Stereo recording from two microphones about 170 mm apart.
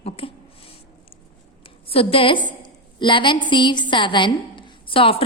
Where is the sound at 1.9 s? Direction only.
35° left (ahead or behind).